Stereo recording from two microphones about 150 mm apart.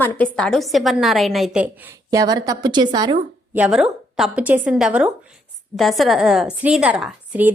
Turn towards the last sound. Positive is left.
turn(degrees=-10)  # may be behind; listen again after turning